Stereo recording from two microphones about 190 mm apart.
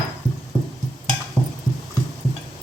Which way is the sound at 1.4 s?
15° right (ahead or behind).